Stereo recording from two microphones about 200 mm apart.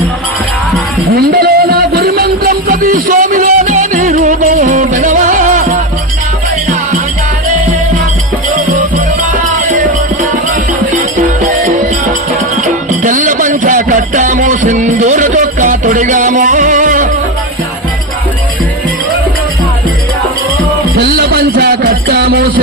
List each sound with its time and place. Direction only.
1.1 s music: 50° right (ahead or behind)
10.9 s music: 40° right (ahead or behind)
13.0 s music: 40° right (ahead or behind)
20.9 s music: 50° right (ahead or behind)